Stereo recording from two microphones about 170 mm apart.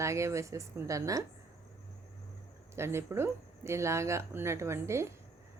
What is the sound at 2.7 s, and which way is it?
A woman's voice, 15° right (ahead or behind).